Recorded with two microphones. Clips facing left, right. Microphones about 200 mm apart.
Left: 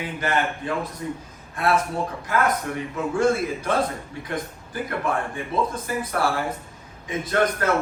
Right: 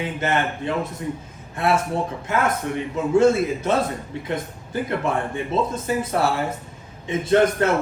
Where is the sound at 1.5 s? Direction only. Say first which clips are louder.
Right 1 dB; 25° right (ahead or behind).